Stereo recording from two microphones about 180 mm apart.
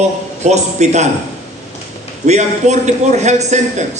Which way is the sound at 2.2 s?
40° right (ahead or behind).